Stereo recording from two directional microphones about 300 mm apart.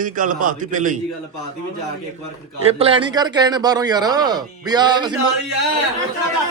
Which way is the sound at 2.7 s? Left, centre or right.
Centre.